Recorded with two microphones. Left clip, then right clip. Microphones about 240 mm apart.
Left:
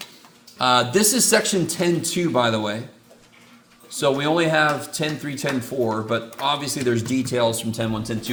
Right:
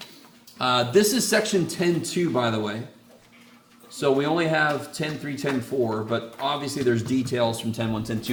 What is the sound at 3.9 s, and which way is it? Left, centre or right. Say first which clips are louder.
Speech: left 2 dB; left.